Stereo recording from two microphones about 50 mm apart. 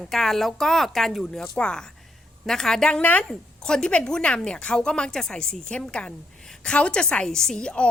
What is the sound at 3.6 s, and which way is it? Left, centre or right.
A woman's voice, centre.